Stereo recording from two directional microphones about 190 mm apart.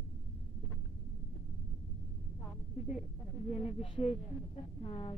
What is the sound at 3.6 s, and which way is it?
A woman's voice, 30° left (ahead or behind).